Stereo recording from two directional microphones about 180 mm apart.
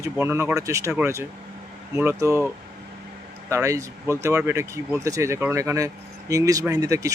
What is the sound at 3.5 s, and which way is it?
Speech, 15° right (ahead or behind).